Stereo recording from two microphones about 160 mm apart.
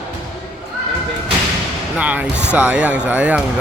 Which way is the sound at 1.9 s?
10° right (ahead or behind).